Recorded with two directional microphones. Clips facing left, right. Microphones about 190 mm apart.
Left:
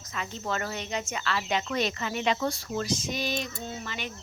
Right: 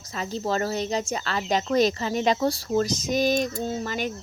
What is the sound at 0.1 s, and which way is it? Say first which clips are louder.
Speech: right 6 dB; 35° right (ahead or behind).